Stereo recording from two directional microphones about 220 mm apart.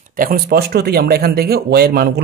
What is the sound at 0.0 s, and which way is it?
Speech, 40° right (ahead or behind).